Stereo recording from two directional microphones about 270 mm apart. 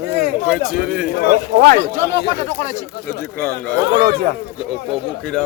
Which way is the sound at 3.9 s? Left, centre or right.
Right.